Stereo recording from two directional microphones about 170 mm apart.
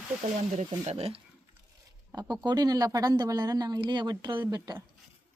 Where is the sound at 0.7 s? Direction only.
35° right (ahead or behind).